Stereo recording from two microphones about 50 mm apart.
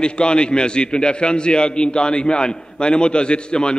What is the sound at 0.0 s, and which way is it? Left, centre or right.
A man's voice, centre.